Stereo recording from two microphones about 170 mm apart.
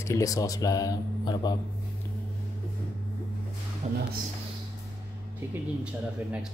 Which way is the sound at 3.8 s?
40° right (ahead or behind).